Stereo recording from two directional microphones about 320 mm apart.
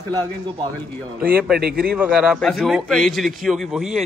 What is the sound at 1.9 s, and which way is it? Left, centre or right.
A man's voice, centre.